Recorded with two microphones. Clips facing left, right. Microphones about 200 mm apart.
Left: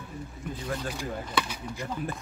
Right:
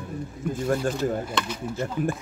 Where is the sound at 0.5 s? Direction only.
50° right (ahead or behind).